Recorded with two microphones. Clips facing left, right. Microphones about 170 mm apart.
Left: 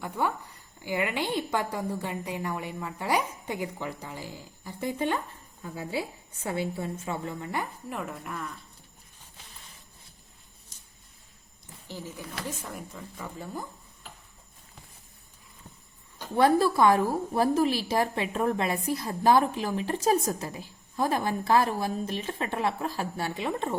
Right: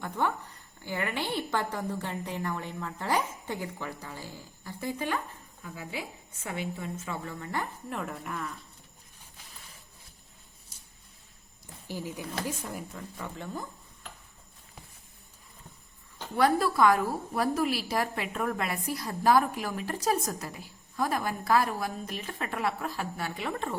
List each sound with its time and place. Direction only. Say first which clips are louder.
0.0 s a woman's voice: left 1 dB; 10° left (ahead or behind)
7.9 s speech: even; centre (ahead or behind)
11.9 s speech: right 3 dB; 15° right (ahead or behind)
12.5 s speech: right 1 dB; centre (ahead or behind)
16.3 s a woman's voice: left 3 dB; 25° left (ahead or behind)